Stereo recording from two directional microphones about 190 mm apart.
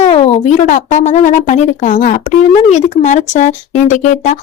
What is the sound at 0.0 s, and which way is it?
A woman's voice, 30° left (ahead or behind).